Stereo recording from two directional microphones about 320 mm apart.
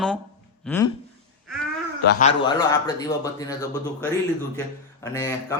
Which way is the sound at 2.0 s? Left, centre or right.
Left.